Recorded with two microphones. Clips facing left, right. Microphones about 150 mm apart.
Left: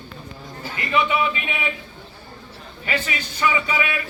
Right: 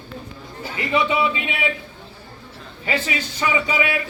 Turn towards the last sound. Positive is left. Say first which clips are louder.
# right 2 dB
turn(degrees=-25)  # may be behind; listen again after turning